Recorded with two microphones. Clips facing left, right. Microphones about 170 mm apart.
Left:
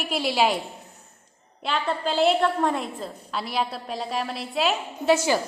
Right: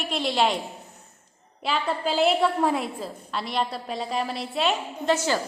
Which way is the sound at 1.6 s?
Centre (ahead or behind).